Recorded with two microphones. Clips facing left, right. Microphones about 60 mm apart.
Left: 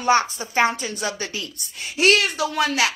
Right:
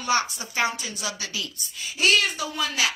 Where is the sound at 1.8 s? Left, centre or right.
Left.